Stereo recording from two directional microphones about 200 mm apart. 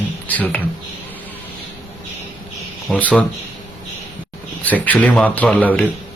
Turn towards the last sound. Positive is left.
turn(degrees=10)  # may be behind; listen again after turning